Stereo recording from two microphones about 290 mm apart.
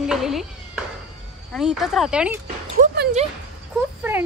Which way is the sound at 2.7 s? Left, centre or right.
Right.